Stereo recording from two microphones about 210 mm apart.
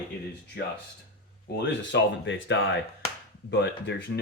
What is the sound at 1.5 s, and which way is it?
Speech, 55° left (ahead or behind).